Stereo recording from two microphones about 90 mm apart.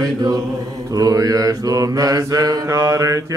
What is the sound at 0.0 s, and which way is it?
Mantra, 45° right (ahead or behind).